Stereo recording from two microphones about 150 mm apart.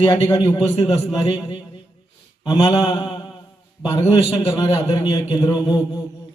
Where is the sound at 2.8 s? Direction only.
30° left (ahead or behind).